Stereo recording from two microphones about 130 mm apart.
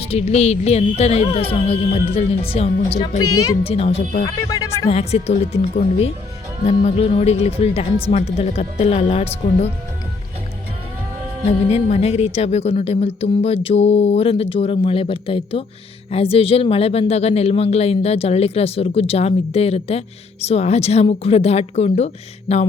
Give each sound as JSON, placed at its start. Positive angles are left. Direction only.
{"t": 0.0, "sound": "speech", "side_deg": 50}
{"t": 4.4, "sound": "speech", "side_deg": 25}
{"t": 4.9, "sound": "speech", "side_deg": 55}
{"t": 11.7, "sound": "speech", "side_deg": 55}